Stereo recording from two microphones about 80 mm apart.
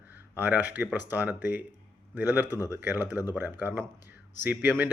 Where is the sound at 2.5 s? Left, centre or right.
Left.